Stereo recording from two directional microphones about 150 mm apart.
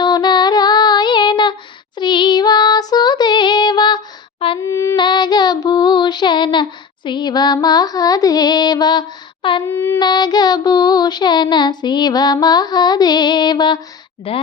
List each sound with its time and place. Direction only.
0.0 s female singing: 30° left (ahead or behind)
2.0 s child singing: 30° left (ahead or behind)
4.6 s female singing: 20° left (ahead or behind)
4.9 s child singing: 30° left (ahead or behind)
9.6 s a sound: 15° left (ahead or behind)
10.0 s child singing: 30° left (ahead or behind)
14.3 s speech: 35° left (ahead or behind)